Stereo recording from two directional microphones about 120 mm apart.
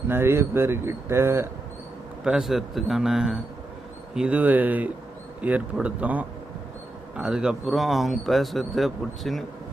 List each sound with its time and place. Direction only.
0.1 s speech: 20° right (ahead or behind)
2.2 s speech: 5° right (ahead or behind)